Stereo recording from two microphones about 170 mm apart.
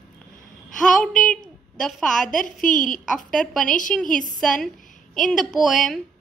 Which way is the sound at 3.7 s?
50° left (ahead or behind).